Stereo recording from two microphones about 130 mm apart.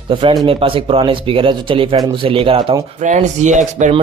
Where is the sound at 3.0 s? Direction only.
70° right (ahead or behind).